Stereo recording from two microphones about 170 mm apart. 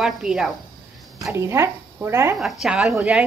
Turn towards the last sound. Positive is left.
turn(degrees=-10)  # may be behind; listen again after turning